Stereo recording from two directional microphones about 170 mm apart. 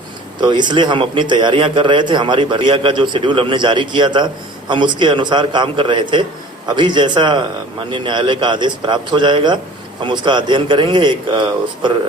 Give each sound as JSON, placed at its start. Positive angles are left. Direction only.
{"t": 0.3, "sound": "a man's voice", "side_deg": -25}